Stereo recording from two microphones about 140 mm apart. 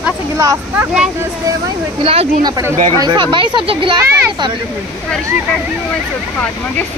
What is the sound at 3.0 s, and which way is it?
Speech, 30° right (ahead or behind).